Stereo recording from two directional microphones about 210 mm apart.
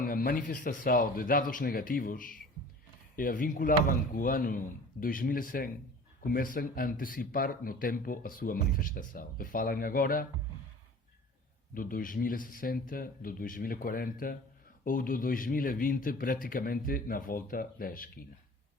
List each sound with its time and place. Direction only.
0.0 s a man's voice: 45° left (ahead or behind)
11.7 s a man's voice: 40° left (ahead or behind)